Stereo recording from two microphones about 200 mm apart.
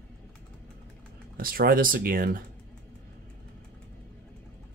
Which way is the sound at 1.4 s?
45° right (ahead or behind).